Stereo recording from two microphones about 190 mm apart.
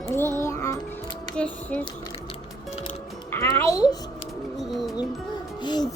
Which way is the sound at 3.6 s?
20° left (ahead or behind).